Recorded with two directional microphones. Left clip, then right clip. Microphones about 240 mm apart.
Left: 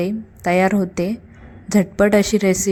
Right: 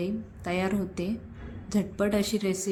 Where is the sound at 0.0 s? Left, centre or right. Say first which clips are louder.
Left 11 dB; left.